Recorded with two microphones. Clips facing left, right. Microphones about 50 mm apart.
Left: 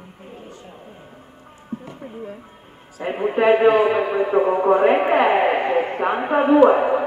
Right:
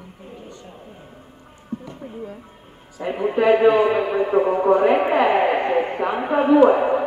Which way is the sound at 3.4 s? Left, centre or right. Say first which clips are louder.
Even; centre.